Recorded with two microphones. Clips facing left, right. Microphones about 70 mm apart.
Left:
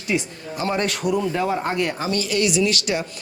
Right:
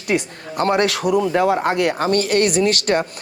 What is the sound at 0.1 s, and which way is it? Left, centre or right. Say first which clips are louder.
Speech: right 3 dB; right.